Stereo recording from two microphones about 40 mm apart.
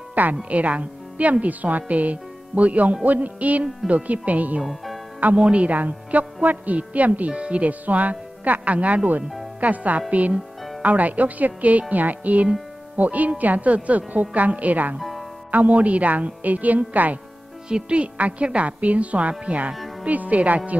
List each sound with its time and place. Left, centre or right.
0.1 s music: right
0.5 s a woman's voice: right
11.9 s music: right
12.9 s a woman's voice: right
15.0 s music: centre
15.5 s a woman's voice: right
17.6 s a woman's voice: right